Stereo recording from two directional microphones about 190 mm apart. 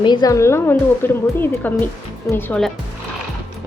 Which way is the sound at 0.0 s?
20° left (ahead or behind).